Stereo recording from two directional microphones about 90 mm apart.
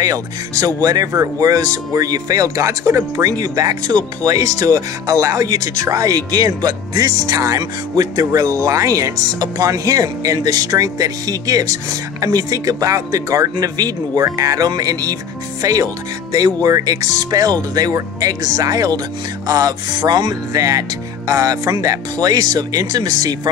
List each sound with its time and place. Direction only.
0.0 s speech: 40° right (ahead or behind)